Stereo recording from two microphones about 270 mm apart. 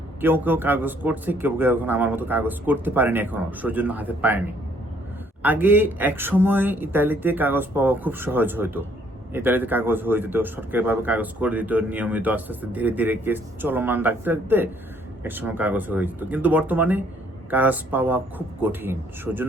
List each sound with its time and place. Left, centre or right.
0.2 s speech: centre